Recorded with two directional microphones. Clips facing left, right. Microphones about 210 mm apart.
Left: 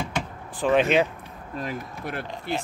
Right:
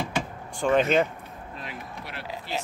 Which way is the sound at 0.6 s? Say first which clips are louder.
Left 1 dB; centre (ahead or behind).